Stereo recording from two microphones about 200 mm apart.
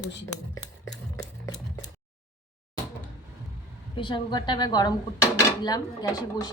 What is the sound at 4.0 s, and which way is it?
Speech, 25° left (ahead or behind).